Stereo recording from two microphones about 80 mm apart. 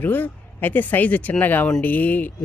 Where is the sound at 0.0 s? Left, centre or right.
Left.